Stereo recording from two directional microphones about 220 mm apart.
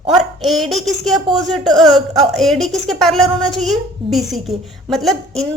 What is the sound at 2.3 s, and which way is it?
A woman's voice, centre (ahead or behind).